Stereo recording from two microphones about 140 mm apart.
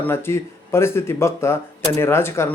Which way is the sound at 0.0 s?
15° left (ahead or behind).